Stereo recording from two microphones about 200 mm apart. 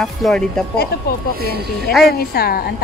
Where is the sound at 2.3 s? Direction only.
50° left (ahead or behind).